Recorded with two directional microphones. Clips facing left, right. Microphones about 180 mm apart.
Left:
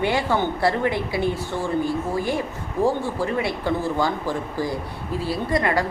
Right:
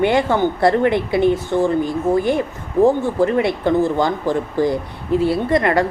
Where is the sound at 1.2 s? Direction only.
20° right (ahead or behind).